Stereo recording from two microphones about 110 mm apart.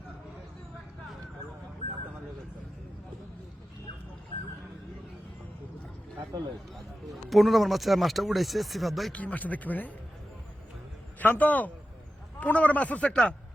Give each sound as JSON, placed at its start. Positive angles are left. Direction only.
{"t": 6.3, "sound": "speech", "side_deg": -35}
{"t": 7.3, "sound": "speech", "side_deg": 0}
{"t": 9.1, "sound": "a man's voice", "side_deg": 15}
{"t": 11.2, "sound": "a man's voice", "side_deg": 15}